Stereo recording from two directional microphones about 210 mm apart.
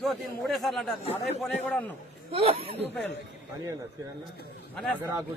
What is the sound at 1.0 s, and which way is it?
Speech, 30° left (ahead or behind).